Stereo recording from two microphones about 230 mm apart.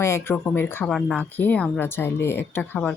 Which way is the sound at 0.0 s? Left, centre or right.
Centre.